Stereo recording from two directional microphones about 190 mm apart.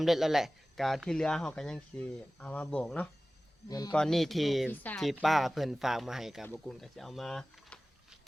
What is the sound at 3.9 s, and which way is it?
Speech, 5° left (ahead or behind).